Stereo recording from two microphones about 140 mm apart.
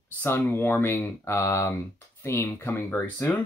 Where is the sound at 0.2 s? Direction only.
15° left (ahead or behind).